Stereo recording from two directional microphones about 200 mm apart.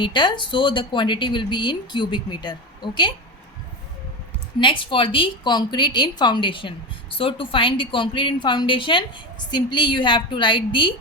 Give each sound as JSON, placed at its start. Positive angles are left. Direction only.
{"t": 0.0, "sound": "a woman's voice", "side_deg": 20}
{"t": 4.6, "sound": "a woman's voice", "side_deg": 25}